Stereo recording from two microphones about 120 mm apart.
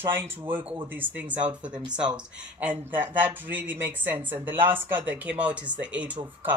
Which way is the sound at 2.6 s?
15° right (ahead or behind).